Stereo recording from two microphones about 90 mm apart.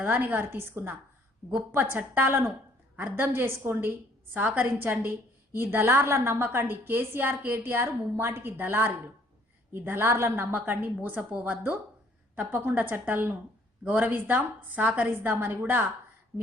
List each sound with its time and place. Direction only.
0.0 s a woman's voice: 20° right (ahead or behind)